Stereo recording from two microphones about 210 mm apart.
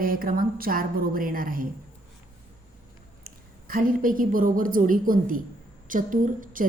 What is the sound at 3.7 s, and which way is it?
A woman's voice, 40° right (ahead or behind).